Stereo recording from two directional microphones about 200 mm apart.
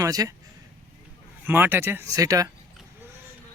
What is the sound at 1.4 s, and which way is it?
Speech, 10° right (ahead or behind).